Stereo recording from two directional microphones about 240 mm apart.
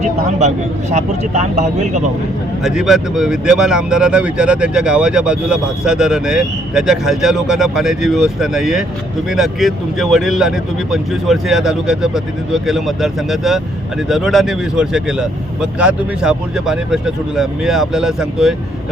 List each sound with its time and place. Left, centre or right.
0.3 s speech: right
2.6 s speech: centre